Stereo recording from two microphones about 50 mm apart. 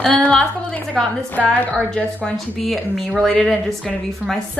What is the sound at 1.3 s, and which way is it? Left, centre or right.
Speech, left.